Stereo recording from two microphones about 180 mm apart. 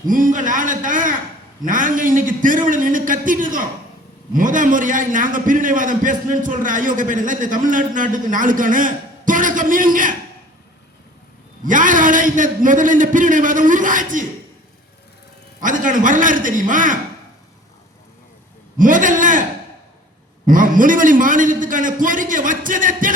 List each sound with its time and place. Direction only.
0.1 s a man's voice: 50° right (ahead or behind)
11.6 s a man's voice: 45° right (ahead or behind)
15.6 s a man's voice: 50° right (ahead or behind)
18.8 s a man's voice: 45° right (ahead or behind)
20.5 s a man's voice: 50° right (ahead or behind)